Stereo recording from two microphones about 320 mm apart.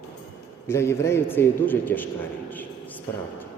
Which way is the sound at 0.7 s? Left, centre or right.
Centre.